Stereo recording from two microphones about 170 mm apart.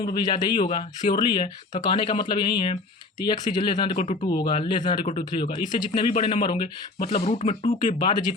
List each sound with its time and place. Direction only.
0.0 s speech: 25° left (ahead or behind)
3.9 s speech: 40° left (ahead or behind)
4.4 s speech: 25° left (ahead or behind)
5.0 s speech: 40° left (ahead or behind)
5.5 s speech: 25° left (ahead or behind)
7.0 s speech: 40° left (ahead or behind)
7.9 s speech: 25° left (ahead or behind)